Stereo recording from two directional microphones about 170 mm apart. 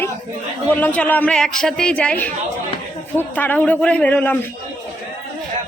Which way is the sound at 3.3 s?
10° left (ahead or behind).